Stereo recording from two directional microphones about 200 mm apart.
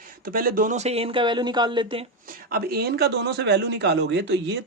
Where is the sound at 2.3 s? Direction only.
50° right (ahead or behind).